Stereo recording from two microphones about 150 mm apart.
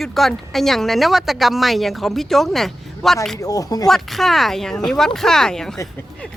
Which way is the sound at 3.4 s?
25° left (ahead or behind).